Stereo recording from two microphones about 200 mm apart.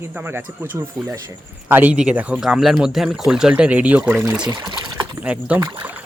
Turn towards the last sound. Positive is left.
turn(degrees=-10)  # may be behind; listen again after turning